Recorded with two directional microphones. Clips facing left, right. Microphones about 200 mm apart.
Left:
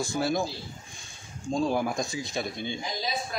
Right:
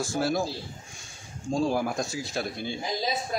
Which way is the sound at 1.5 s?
5° right (ahead or behind).